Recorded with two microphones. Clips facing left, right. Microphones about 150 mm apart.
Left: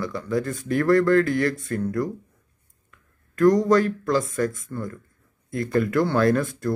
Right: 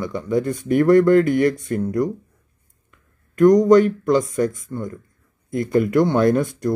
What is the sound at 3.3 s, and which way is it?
Speech, 20° right (ahead or behind).